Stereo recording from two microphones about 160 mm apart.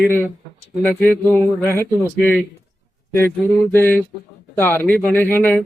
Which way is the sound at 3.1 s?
15° left (ahead or behind).